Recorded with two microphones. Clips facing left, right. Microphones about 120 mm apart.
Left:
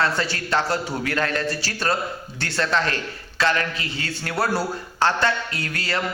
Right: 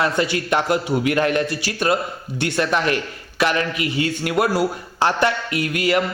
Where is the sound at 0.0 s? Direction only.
15° right (ahead or behind).